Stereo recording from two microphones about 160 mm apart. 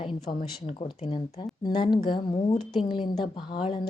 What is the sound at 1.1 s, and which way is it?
Speech, 30° left (ahead or behind).